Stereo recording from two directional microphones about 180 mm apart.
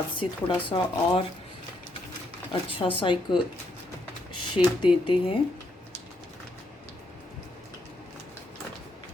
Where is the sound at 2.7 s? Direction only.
30° left (ahead or behind).